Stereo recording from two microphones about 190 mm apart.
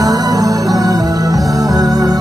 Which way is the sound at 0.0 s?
20° right (ahead or behind).